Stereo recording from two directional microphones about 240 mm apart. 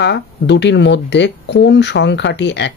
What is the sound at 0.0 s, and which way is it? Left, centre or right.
Speech, left.